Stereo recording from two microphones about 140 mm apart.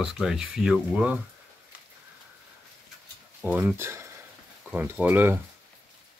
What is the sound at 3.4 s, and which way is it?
Speech, 10° right (ahead or behind).